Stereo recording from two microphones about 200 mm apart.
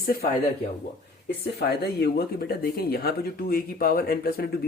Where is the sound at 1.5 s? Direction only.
55° left (ahead or behind).